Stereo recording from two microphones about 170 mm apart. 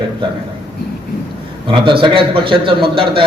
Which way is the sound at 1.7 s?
30° right (ahead or behind).